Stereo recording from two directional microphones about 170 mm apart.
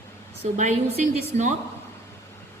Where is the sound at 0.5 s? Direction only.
45° right (ahead or behind).